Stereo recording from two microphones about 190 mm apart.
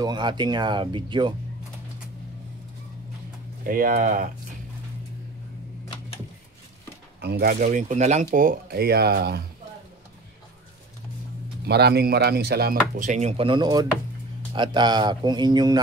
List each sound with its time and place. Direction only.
0.0 s speech: 25° right (ahead or behind)
3.6 s speech: 50° right (ahead or behind)
7.2 s speech: 60° right (ahead or behind)
7.6 s speech: 40° right (ahead or behind); by 9.4 s 55° right (ahead or behind)
11.6 s speech: 60° right (ahead or behind); by 15.8 s 20° right (ahead or behind)